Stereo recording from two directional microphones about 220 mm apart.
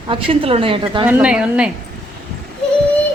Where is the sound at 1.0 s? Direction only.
5° right (ahead or behind).